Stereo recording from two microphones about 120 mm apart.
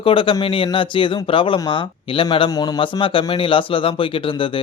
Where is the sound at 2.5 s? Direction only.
35° left (ahead or behind).